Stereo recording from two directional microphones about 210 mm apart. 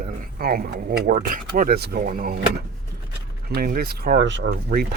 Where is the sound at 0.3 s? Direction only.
45° right (ahead or behind).